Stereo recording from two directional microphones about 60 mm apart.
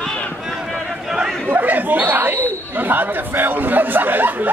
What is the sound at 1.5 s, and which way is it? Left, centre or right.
Speech, right.